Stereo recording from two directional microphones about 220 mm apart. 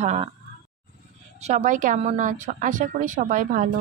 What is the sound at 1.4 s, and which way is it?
A woman's voice, 35° right (ahead or behind).